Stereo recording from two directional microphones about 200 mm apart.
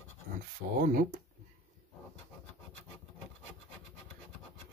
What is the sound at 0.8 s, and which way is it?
Speech, 45° right (ahead or behind).